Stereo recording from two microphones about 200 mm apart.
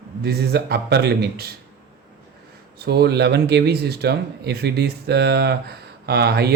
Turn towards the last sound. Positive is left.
turn(degrees=-55)  # may be behind; listen again after turning